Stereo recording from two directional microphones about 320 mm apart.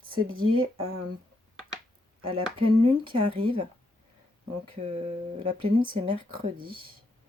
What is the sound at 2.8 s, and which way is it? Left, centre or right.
Speech, centre.